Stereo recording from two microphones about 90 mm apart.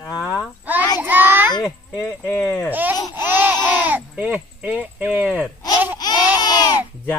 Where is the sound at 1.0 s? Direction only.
20° right (ahead or behind).